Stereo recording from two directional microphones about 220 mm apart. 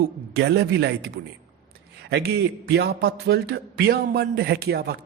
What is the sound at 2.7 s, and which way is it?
A man's voice, 50° right (ahead or behind).